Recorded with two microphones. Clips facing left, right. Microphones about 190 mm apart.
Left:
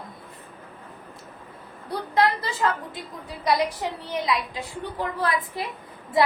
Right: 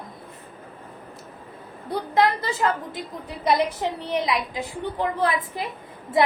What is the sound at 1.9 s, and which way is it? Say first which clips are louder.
A woman's voice: right 2 dB; 20° right (ahead or behind).